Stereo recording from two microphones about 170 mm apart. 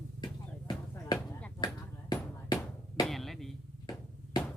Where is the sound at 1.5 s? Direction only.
20° left (ahead or behind).